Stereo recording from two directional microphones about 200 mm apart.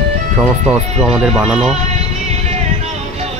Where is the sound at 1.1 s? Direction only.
Centre (ahead or behind).